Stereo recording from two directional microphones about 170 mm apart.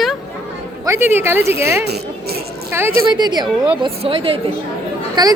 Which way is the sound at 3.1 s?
25° right (ahead or behind).